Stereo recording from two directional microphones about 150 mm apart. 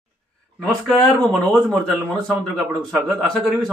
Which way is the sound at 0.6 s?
5° left (ahead or behind).